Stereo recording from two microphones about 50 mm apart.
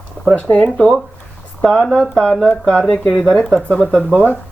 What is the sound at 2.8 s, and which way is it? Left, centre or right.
Speech, centre.